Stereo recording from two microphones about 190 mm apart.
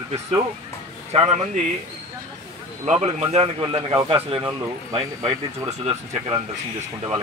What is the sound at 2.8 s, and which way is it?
Speech, 35° right (ahead or behind).